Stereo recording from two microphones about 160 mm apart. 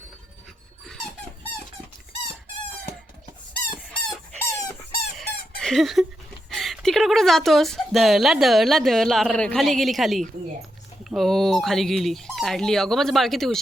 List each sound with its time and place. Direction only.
0.9 s squeak: 5° left (ahead or behind)
3.8 s chicken: centre (ahead or behind)
4.4 s squeak: 20° left (ahead or behind)
5.1 s fowl: centre (ahead or behind)
6.5 s speech: centre (ahead or behind)